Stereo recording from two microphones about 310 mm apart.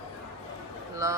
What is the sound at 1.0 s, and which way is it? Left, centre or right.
Speech, centre.